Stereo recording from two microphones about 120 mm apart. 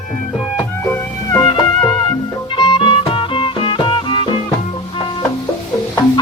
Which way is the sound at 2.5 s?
45° left (ahead or behind).